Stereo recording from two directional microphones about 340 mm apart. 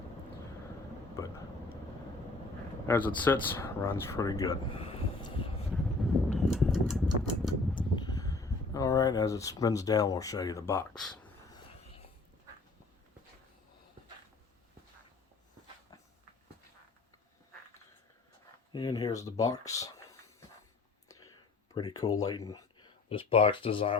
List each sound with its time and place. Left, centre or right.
2.8 s speech: centre
5.6 s a sound: centre
7.8 s speech: centre
11.7 s whispering: centre
18.7 s speech: centre
21.2 s a sound: centre
22.2 s speech: centre